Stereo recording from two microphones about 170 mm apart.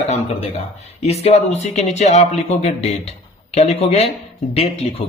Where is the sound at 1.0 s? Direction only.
40° left (ahead or behind).